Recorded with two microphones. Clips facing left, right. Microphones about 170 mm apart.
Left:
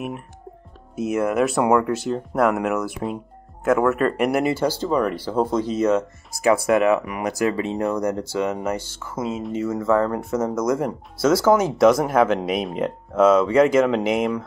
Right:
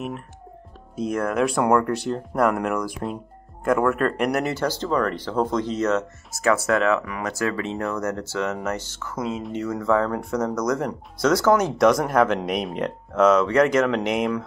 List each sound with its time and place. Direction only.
0.9 s speech: 10° left (ahead or behind)